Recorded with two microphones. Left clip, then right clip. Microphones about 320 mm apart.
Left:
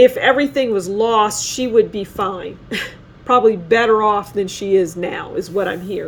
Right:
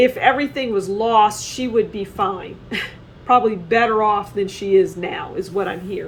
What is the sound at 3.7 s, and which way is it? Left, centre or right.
Speech, left.